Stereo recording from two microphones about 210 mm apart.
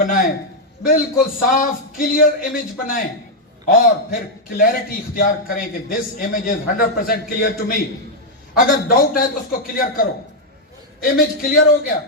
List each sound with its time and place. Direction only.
0.0 s a sound: 40° left (ahead or behind)
0.9 s a man's voice: 40° left (ahead or behind)
11.0 s a man's voice: 45° left (ahead or behind)